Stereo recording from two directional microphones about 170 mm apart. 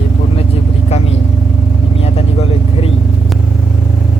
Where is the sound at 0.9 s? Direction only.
40° left (ahead or behind).